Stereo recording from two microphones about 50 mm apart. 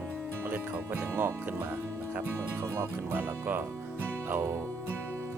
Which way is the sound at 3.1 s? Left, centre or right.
Right.